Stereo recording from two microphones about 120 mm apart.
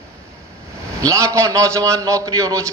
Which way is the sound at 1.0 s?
25° right (ahead or behind).